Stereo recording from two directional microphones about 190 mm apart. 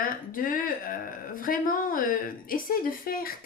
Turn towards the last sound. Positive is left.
turn(degrees=50)  # may be behind; listen again after turning